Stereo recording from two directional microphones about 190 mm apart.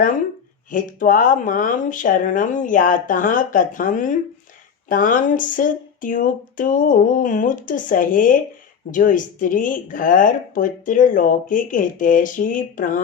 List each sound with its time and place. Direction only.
0.7 s speech: 45° left (ahead or behind)